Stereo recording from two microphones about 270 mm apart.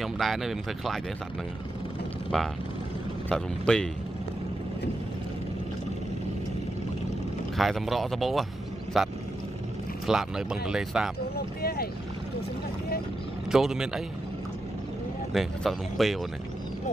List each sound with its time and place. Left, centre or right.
0.0 s speech: centre
2.3 s speech: centre
7.5 s speech: centre
11.3 s a sound: left
13.5 s speech: centre
15.3 s speech: centre